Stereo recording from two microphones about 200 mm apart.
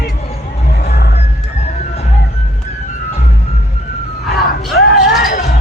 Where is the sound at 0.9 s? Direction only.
55° left (ahead or behind).